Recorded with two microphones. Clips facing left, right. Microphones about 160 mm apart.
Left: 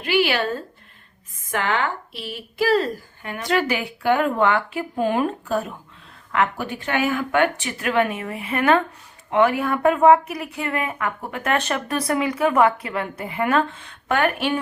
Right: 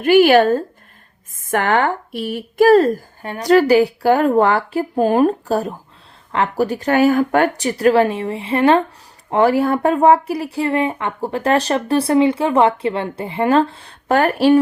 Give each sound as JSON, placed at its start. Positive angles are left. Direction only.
{"t": 0.0, "sound": "speech", "side_deg": -50}